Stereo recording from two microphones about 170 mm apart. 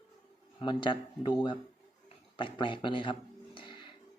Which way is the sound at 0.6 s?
25° left (ahead or behind).